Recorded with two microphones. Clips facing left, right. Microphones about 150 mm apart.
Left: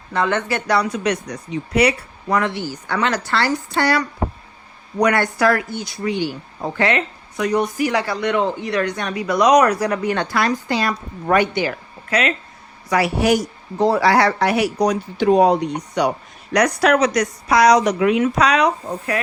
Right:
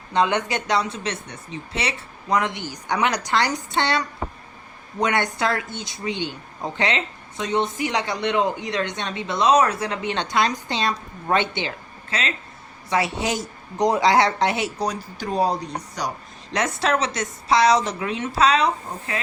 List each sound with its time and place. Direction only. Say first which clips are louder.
0.1 s speech: left 1 dB; 20° right (ahead or behind)
5.0 s speech: left 6 dB; 20° right (ahead or behind)
15.3 s speech: left 8 dB; 70° left (ahead or behind)
16.5 s speech: left 7 dB; 25° right (ahead or behind)